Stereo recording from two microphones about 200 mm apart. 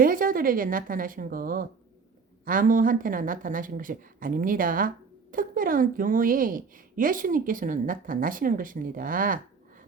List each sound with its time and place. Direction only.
0.0 s a woman's voice: 45° right (ahead or behind)